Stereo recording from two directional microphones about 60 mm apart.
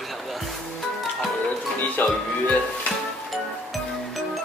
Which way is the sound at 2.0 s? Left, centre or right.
Left.